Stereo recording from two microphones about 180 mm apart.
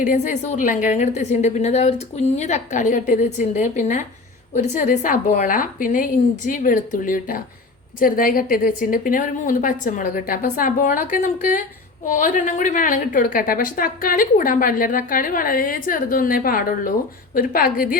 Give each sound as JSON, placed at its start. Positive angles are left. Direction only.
{"t": 0.0, "sound": "a woman's voice", "side_deg": 45}